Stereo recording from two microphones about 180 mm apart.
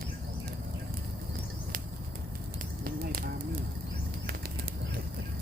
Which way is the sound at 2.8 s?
55° right (ahead or behind).